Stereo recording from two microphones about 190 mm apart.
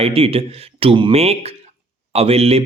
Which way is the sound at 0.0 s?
30° right (ahead or behind).